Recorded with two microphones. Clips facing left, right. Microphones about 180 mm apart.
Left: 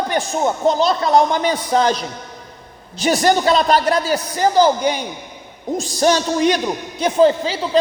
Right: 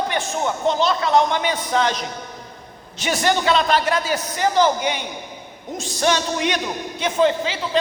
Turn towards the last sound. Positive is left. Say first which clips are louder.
# left 4 dB
turn(degrees=35)  # may be behind; listen again after turning